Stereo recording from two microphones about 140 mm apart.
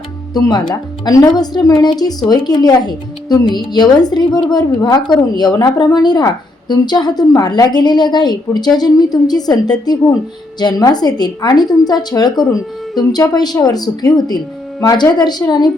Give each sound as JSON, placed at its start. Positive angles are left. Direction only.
{"t": 0.3, "sound": "speech", "side_deg": 30}